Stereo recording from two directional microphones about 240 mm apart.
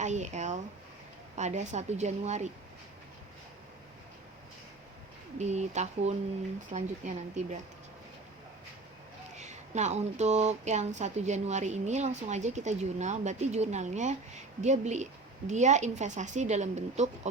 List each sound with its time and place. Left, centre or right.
0.0 s a woman's voice: right
5.4 s a woman's voice: right
9.3 s a woman's voice: right